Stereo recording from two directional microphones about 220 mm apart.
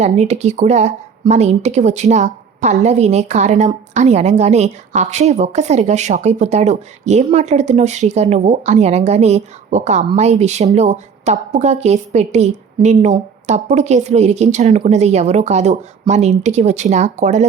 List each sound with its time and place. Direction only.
0.0 s a woman's voice: 30° right (ahead or behind)